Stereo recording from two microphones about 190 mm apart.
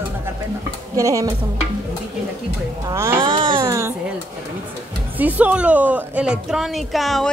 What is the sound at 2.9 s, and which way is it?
Music, 15° right (ahead or behind).